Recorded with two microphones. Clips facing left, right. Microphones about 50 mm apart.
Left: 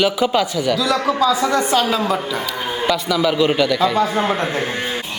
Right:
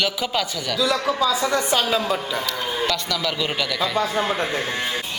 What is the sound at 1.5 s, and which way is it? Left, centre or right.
Speech, left.